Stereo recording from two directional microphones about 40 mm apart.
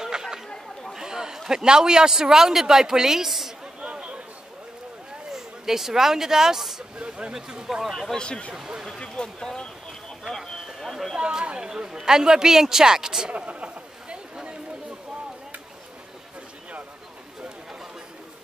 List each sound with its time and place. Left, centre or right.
0.0 s chatter: centre
0.9 s a man's voice: centre
3.8 s chatter: right
5.3 s speech: centre
7.0 s speech: right
7.3 s a man's voice: centre
7.9 s speech: centre
8.2 s speech: left
8.5 s a man's voice: centre
9.0 s speech: centre
10.3 s a sound: centre
11.1 s chatter: right
11.7 s a man's voice: centre
13.3 s a sound: right